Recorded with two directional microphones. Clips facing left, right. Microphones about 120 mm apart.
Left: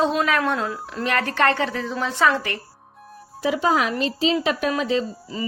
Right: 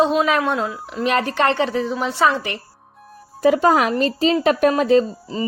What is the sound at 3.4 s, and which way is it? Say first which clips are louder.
Speech: right 6 dB; 50° right (ahead or behind).